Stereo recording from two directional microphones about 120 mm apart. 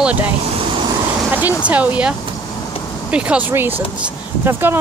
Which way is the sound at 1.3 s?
15° right (ahead or behind).